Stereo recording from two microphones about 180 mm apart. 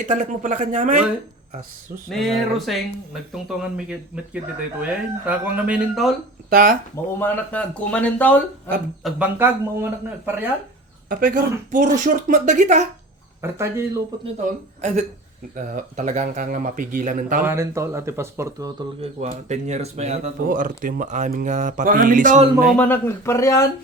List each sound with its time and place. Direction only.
0.0 s speech: 45° right (ahead or behind)
2.0 s speech: centre (ahead or behind)
6.5 s speech: 50° right (ahead or behind)
7.2 s speech: 10° left (ahead or behind)
9.1 s speech: 10° right (ahead or behind)
11.1 s speech: 50° right (ahead or behind)
13.4 s speech: 15° right (ahead or behind)
14.8 s speech: 40° right (ahead or behind)
17.4 s speech: 15° right (ahead or behind)
19.3 s speech: 40° right (ahead or behind)
22.8 s speech: 15° left (ahead or behind)